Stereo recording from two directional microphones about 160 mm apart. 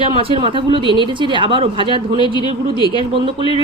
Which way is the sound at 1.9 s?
30° left (ahead or behind).